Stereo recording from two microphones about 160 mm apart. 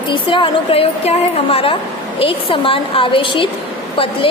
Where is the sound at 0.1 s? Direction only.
30° left (ahead or behind).